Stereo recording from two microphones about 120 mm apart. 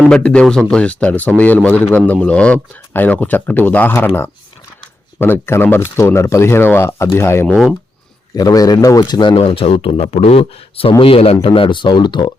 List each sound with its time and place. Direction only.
0.1 s speech: 10° left (ahead or behind)
7.4 s speech: centre (ahead or behind)
8.4 s speech: 30° left (ahead or behind)
9.3 s speech: 50° left (ahead or behind)